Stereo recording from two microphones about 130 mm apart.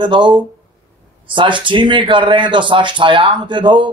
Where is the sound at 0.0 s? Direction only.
35° right (ahead or behind).